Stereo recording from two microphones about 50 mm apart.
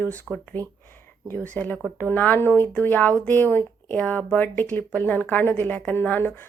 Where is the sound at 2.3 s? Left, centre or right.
Left.